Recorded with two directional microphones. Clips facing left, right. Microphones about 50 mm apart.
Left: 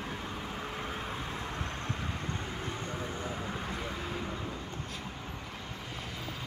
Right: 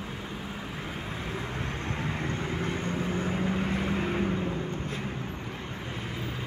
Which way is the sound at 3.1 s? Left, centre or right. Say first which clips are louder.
Right 8 dB; right.